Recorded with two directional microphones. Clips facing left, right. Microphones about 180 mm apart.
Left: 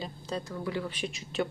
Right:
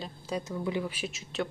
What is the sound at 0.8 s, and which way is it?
Speech, 5° right (ahead or behind).